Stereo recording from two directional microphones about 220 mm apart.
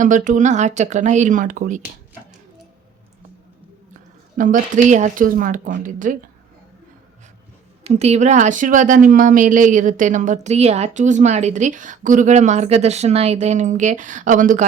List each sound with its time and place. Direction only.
0.0 s a woman's voice: 35° right (ahead or behind)
4.4 s a woman's voice: 35° right (ahead or behind)
7.9 s a woman's voice: 30° right (ahead or behind)